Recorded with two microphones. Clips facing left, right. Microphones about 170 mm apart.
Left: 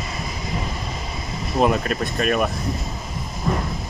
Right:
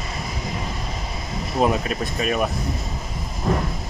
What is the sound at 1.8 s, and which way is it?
Speech, 5° right (ahead or behind).